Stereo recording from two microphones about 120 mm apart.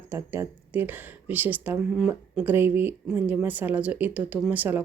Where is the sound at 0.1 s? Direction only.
20° right (ahead or behind).